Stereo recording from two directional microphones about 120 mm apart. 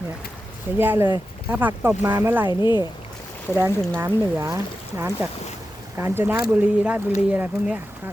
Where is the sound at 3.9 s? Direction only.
20° right (ahead or behind).